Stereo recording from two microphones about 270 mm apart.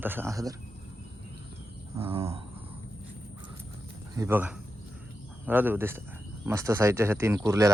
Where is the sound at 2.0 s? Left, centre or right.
Centre.